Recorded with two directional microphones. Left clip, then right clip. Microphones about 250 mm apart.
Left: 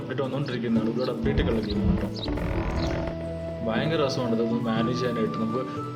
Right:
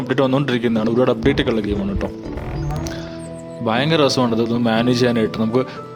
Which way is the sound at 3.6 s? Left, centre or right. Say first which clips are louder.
Right 10 dB; right.